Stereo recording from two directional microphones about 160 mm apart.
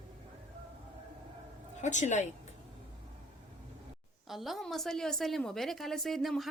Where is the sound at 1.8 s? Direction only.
50° left (ahead or behind).